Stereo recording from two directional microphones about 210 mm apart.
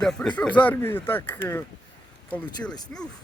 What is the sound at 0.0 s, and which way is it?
Speech, centre (ahead or behind).